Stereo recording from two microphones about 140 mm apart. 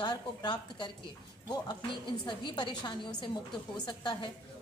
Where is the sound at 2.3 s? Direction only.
35° left (ahead or behind).